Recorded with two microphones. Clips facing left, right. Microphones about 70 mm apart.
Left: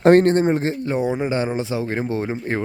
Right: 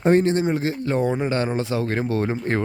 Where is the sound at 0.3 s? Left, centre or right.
Left.